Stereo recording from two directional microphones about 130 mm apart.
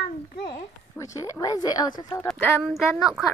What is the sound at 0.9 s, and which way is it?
Speech, 25° left (ahead or behind).